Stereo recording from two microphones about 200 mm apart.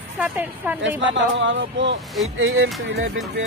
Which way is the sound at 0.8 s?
70° right (ahead or behind).